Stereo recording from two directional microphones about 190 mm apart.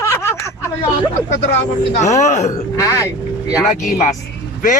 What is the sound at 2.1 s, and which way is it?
Speech, 35° left (ahead or behind).